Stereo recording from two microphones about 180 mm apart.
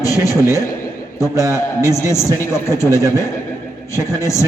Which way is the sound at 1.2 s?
15° left (ahead or behind).